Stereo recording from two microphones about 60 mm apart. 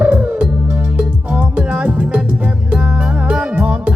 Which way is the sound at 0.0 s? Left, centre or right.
Right.